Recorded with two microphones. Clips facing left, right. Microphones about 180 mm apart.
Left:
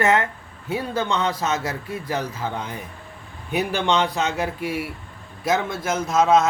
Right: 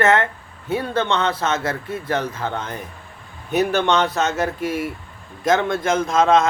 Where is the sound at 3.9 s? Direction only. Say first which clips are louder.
Right 2 dB; 15° left (ahead or behind).